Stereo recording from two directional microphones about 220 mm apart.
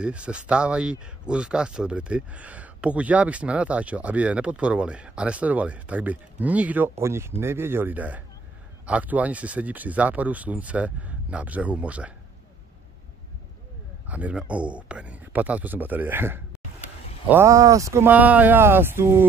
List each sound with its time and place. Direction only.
0.0 s speech: 5° right (ahead or behind)
14.0 s speech: 5° right (ahead or behind)